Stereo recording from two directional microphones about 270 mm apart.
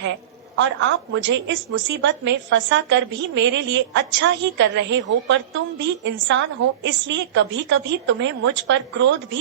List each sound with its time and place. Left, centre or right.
0.5 s a woman's voice: right